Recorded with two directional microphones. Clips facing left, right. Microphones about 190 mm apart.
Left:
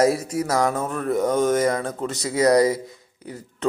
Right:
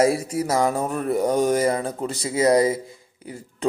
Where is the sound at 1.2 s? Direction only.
35° right (ahead or behind).